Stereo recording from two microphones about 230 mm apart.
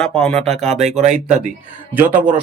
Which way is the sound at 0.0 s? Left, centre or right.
Centre.